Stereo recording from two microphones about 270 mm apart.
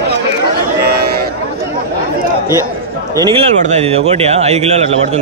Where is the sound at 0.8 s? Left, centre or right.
Right.